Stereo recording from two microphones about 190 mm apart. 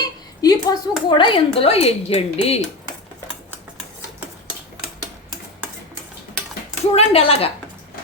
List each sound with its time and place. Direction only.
0.4 s speech: 20° left (ahead or behind)
6.9 s a woman's voice: 30° left (ahead or behind)